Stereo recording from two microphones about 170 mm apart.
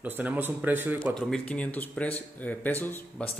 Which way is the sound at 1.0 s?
Centre (ahead or behind).